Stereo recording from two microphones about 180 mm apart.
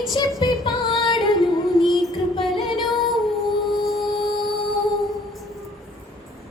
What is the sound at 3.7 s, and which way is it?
Music, centre (ahead or behind).